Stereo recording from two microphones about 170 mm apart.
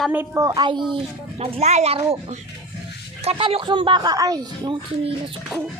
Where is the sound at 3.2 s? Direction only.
35° right (ahead or behind).